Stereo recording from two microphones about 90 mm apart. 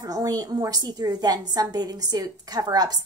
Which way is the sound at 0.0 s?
45° right (ahead or behind).